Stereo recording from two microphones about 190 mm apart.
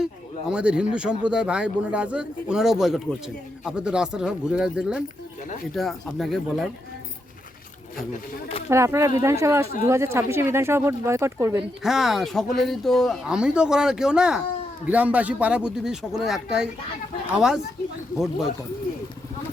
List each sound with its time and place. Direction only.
0.0 s speech: 5° right (ahead or behind)
8.1 s speech: 30° left (ahead or behind)
8.7 s speech: 15° right (ahead or behind)
11.8 s speech: centre (ahead or behind)